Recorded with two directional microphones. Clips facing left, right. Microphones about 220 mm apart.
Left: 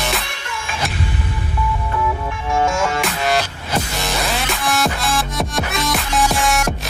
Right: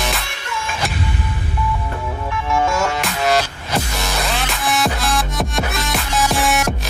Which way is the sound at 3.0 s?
Centre (ahead or behind).